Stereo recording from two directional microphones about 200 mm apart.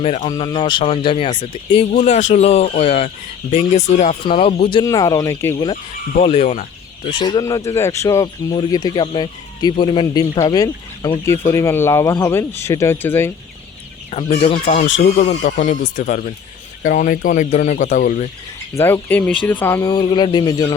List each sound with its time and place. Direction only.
0.0 s speech: 30° left (ahead or behind)
0.3 s speech: 20° left (ahead or behind)
5.7 s speech: 35° left (ahead or behind)
7.0 s speech: 25° left (ahead or behind)
14.4 s speech: 25° left (ahead or behind)
14.8 s speech: 60° left (ahead or behind)
15.2 s speech: 35° left (ahead or behind)
18.7 s speech: 10° left (ahead or behind)
19.8 s speech: 20° left (ahead or behind)